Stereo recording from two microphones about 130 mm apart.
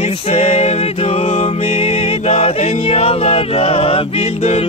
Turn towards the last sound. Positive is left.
turn(degrees=50)  # may be behind; listen again after turning